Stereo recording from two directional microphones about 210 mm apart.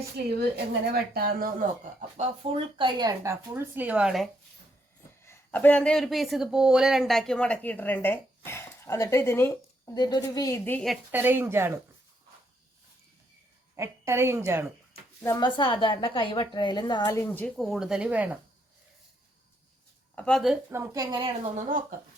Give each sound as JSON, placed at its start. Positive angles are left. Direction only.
{"t": 0.3, "sound": "a woman's voice", "side_deg": -50}
{"t": 5.2, "sound": "speech", "side_deg": 10}
{"t": 11.1, "sound": "a woman's voice", "side_deg": -10}
{"t": 13.7, "sound": "a woman's voice", "side_deg": -15}
{"t": 15.2, "sound": "a woman's voice", "side_deg": 15}
{"t": 20.1, "sound": "speech", "side_deg": 5}
{"t": 20.7, "sound": "a woman's voice", "side_deg": -15}